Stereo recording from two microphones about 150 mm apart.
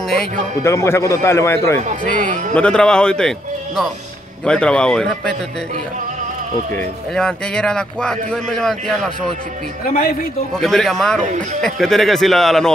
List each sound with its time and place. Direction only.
0.7 s a man's voice: 20° left (ahead or behind)
2.1 s speech: 60° right (ahead or behind)
2.5 s speech: 5° left (ahead or behind)
6.7 s speech: 10° left (ahead or behind)
9.8 s speech: 80° left
10.5 s speech: 5° left (ahead or behind)